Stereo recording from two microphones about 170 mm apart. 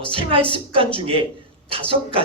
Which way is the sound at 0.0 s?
30° right (ahead or behind).